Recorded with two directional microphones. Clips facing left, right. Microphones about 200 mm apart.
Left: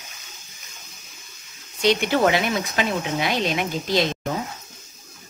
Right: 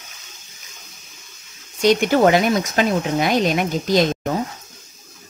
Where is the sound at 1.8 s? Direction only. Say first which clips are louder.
Right 4 dB; 45° right (ahead or behind).